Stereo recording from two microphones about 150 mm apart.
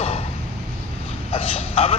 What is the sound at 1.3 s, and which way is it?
Speech, 40° left (ahead or behind).